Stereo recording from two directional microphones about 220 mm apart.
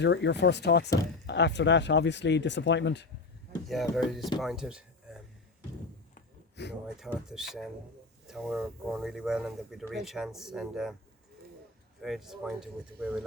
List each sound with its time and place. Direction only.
0.0 s speech: 50° left (ahead or behind)
3.7 s speech: centre (ahead or behind)
6.6 s speech: 50° left (ahead or behind)
7.3 s speech: centre (ahead or behind)
12.0 s speech: centre (ahead or behind)